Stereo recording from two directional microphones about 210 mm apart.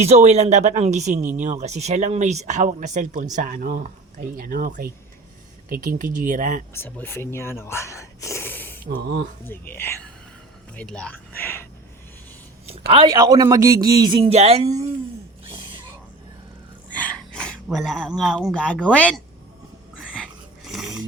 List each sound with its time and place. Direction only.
0.0 s speech: 30° right (ahead or behind)
6.7 s speech: 10° left (ahead or behind)
8.9 s speech: 50° right (ahead or behind)
9.5 s speech: 10° left (ahead or behind)
12.9 s speech: 25° right (ahead or behind)
13.1 s speech: 15° right (ahead or behind)
15.4 s a sound: 25° right (ahead or behind)
16.9 s a sound: 5° left (ahead or behind)
18.9 s speech: 5° left (ahead or behind)
20.7 s dog: centre (ahead or behind)